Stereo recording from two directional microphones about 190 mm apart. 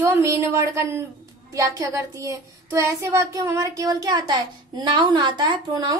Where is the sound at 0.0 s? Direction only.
15° right (ahead or behind).